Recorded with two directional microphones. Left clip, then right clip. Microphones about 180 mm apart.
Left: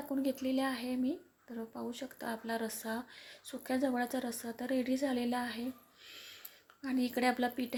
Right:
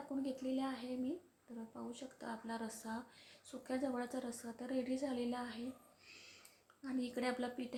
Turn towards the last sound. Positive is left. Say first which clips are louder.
# left 8 dB
turn(degrees=25)  # may be behind; listen again after turning